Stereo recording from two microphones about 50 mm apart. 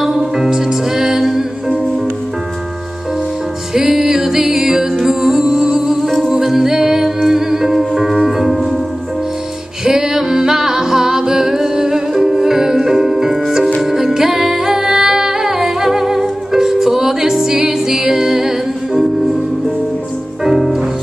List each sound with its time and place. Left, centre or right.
0.0 s music: centre
3.7 s music: centre
9.8 s music: centre
20.4 s music: centre